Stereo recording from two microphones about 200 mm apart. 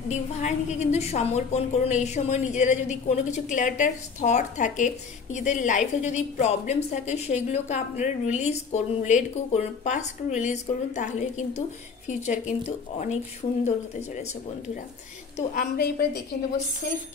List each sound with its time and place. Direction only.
0.1 s a woman's voice: 35° left (ahead or behind)
15.5 s a woman's voice: 45° left (ahead or behind)